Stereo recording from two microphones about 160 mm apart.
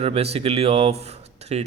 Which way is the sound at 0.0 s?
40° right (ahead or behind).